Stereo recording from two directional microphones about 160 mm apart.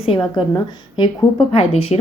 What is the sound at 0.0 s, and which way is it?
A woman's voice, 30° left (ahead or behind).